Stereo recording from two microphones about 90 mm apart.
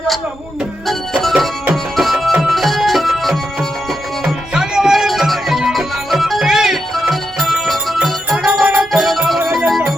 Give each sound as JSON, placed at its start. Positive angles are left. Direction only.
{"t": 0.9, "sound": "music", "side_deg": 0}
{"t": 8.4, "sound": "music", "side_deg": -15}
{"t": 8.9, "sound": "music", "side_deg": 0}